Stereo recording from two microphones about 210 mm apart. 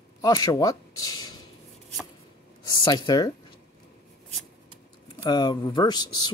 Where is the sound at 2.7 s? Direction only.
20° left (ahead or behind).